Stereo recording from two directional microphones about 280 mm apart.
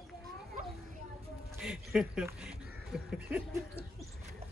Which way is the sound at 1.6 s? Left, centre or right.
Centre.